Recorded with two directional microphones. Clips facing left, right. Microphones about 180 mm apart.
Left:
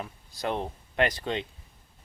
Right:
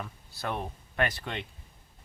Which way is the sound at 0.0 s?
20° left (ahead or behind).